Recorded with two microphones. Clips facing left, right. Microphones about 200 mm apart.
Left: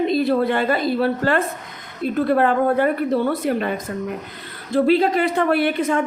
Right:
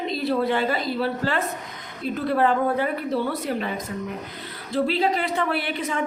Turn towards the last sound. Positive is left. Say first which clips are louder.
# left 8 dB
turn(degrees=50)  # may be behind; listen again after turning